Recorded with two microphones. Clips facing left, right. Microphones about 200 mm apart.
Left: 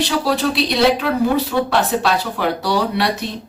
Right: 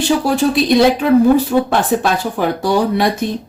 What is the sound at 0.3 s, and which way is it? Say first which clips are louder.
A woman's voice: right 6 dB; 45° right (ahead or behind).